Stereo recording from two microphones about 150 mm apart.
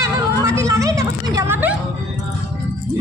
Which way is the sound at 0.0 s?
20° right (ahead or behind).